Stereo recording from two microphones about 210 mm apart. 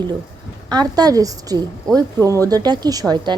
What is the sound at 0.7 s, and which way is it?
A woman's voice, 20° right (ahead or behind).